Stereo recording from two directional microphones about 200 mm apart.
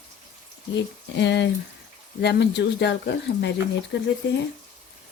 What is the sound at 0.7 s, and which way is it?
Speech, 60° left (ahead or behind).